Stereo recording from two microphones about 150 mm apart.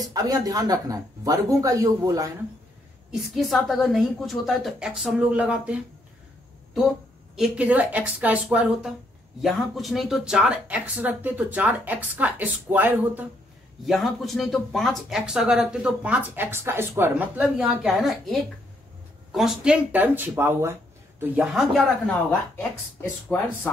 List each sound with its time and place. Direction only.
0.0 s speech: 25° right (ahead or behind)
3.1 s speech: centre (ahead or behind)
7.3 s speech: 5° right (ahead or behind)
13.8 s speech: centre (ahead or behind)
21.5 s speech: centre (ahead or behind)